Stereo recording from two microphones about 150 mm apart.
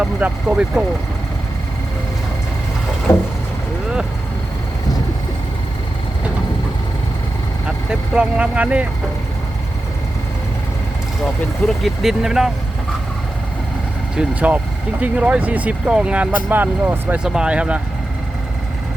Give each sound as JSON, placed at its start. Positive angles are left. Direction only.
{"t": 0.0, "sound": "speech", "side_deg": -5}
{"t": 3.1, "sound": "speech", "side_deg": 20}
{"t": 7.9, "sound": "speech", "side_deg": -10}
{"t": 11.6, "sound": "speech", "side_deg": 0}
{"t": 14.2, "sound": "speech", "side_deg": -10}